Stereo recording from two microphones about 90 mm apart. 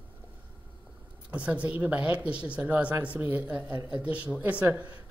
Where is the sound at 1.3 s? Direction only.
15° right (ahead or behind).